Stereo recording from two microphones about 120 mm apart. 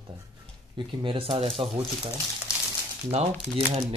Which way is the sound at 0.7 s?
45° right (ahead or behind).